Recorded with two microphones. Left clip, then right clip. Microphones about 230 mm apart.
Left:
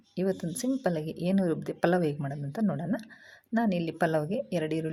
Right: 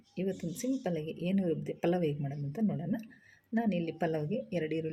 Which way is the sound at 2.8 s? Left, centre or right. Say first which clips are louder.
Left 5 dB; left.